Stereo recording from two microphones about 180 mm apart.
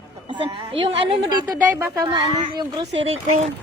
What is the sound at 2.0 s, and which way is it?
Speech, 25° right (ahead or behind).